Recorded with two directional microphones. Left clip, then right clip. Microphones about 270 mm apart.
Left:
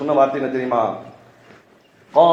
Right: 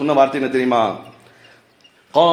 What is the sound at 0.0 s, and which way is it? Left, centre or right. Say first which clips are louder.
Mantra: right 1 dB; right.